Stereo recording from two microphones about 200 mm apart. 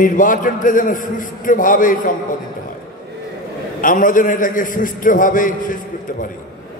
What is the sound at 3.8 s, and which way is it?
A man's voice, 45° left (ahead or behind).